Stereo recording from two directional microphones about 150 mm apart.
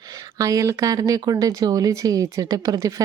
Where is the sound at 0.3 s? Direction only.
20° right (ahead or behind).